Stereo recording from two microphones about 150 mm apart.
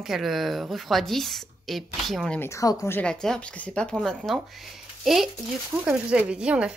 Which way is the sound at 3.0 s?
5° left (ahead or behind).